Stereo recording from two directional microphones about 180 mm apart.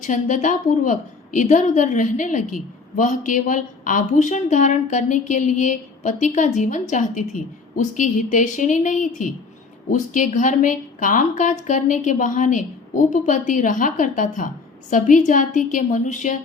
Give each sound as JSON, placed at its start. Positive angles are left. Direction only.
{"t": 0.0, "sound": "a woman's voice", "side_deg": 45}